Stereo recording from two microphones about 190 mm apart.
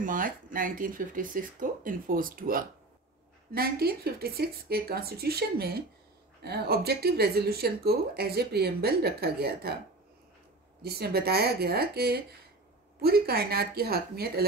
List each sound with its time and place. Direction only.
0.0 s speech: 45° right (ahead or behind)
10.8 s speech: 55° right (ahead or behind)